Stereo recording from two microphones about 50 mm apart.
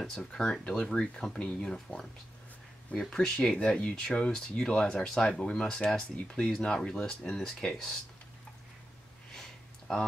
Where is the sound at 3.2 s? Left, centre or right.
Centre.